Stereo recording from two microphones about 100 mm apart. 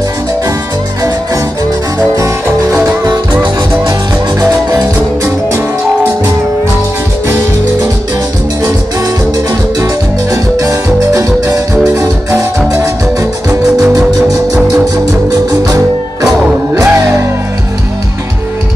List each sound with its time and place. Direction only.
2.1 s music: 30° right (ahead or behind)
4.4 s music: 30° right (ahead or behind)
10.3 s music: 30° right (ahead or behind)
15.6 s music: 35° right (ahead or behind)
16.7 s music: 25° right (ahead or behind)